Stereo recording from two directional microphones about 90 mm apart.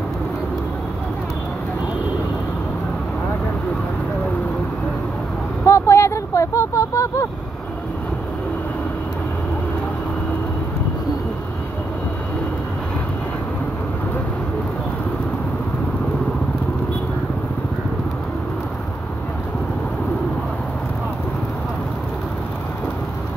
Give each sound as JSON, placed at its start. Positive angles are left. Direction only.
{"t": 5.7, "sound": "vehicle", "side_deg": 30}